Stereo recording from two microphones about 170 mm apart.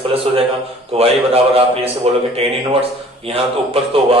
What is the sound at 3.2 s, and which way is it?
Speech, 35° right (ahead or behind).